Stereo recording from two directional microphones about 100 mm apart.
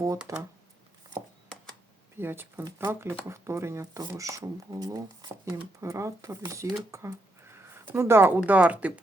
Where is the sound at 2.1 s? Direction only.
20° right (ahead or behind).